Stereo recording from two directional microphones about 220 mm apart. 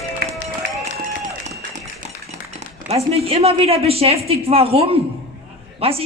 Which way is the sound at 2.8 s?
30° right (ahead or behind).